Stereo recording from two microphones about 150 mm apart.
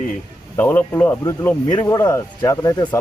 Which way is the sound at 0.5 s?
15° left (ahead or behind).